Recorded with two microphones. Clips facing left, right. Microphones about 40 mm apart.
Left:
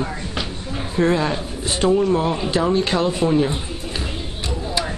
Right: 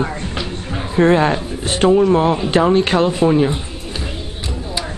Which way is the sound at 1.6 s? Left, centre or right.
Right.